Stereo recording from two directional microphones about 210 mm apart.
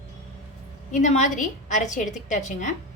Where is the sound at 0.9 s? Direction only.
35° left (ahead or behind).